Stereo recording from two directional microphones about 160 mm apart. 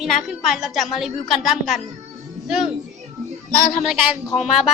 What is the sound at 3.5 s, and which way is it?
Speech, 60° left (ahead or behind).